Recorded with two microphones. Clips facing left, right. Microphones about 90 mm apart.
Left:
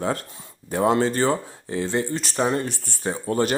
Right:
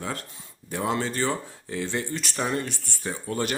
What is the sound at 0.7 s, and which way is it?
Speech, 40° left (ahead or behind).